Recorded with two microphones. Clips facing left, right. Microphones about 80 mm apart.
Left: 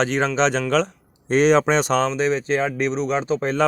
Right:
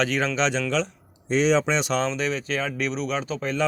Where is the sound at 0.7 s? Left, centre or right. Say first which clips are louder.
Left 8 dB; left.